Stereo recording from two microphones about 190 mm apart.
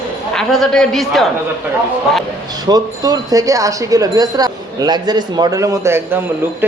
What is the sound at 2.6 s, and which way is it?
Speech, 20° right (ahead or behind).